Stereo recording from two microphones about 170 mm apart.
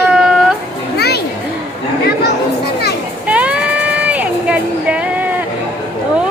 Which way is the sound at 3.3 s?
5° right (ahead or behind).